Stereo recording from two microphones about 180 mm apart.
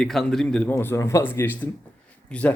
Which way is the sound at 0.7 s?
15° left (ahead or behind).